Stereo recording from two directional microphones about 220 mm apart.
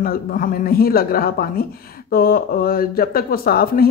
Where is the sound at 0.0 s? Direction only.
40° left (ahead or behind).